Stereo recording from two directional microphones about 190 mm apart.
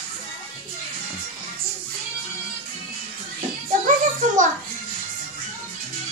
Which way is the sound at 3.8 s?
40° right (ahead or behind).